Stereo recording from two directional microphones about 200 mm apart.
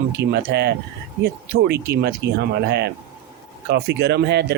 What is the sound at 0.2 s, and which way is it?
Speech, 55° right (ahead or behind).